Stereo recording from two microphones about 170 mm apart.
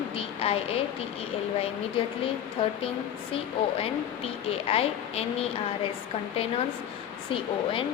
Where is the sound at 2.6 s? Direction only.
30° left (ahead or behind).